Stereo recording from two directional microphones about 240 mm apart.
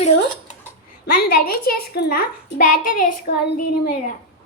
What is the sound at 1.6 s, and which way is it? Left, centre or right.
A child's voice, left.